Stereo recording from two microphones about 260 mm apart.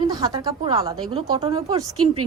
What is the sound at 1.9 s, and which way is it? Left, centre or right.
Speech, right.